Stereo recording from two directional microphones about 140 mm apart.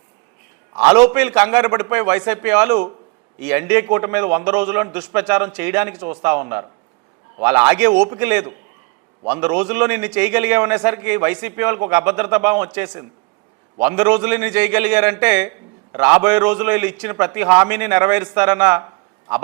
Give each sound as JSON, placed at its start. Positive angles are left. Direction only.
{"t": 1.0, "sound": "a man's voice", "side_deg": -15}
{"t": 7.9, "sound": "a man's voice", "side_deg": -30}
{"t": 8.2, "sound": "a man's voice", "side_deg": -15}